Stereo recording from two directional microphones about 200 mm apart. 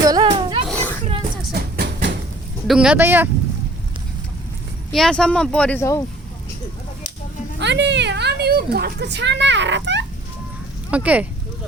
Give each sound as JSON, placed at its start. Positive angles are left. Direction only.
{"t": 0.0, "sound": "a sound", "side_deg": -20}
{"t": 0.7, "sound": "children playing", "side_deg": 10}
{"t": 1.5, "sound": "train", "side_deg": -50}
{"t": 2.6, "sound": "speech", "side_deg": -5}
{"t": 4.9, "sound": "speech", "side_deg": 0}
{"t": 7.6, "sound": "speech", "side_deg": -60}
{"t": 10.9, "sound": "speech", "side_deg": -5}